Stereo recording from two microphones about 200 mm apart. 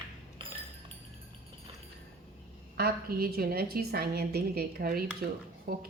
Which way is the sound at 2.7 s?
50° right (ahead or behind).